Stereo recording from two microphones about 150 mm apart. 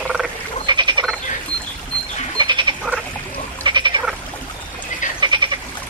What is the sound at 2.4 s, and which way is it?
Frog, 30° right (ahead or behind).